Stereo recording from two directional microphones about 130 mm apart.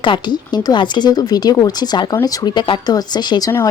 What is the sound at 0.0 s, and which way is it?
Speech, 35° left (ahead or behind).